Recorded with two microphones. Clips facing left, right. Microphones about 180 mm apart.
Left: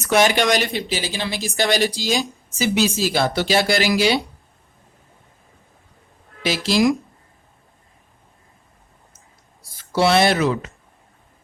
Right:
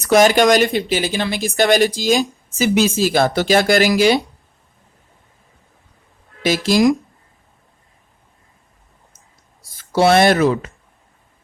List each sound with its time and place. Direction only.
0.0 s a woman's voice: 40° right (ahead or behind)
6.4 s a woman's voice: 50° right (ahead or behind)
9.7 s speech: 45° right (ahead or behind)